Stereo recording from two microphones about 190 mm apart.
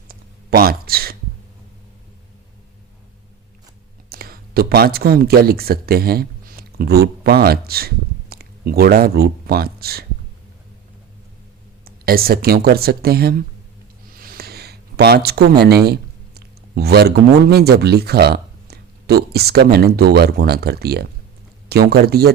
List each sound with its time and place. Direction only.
0.1 s a sound: 50° right (ahead or behind)
4.1 s speech: 50° right (ahead or behind)
11.9 s speech: 50° right (ahead or behind)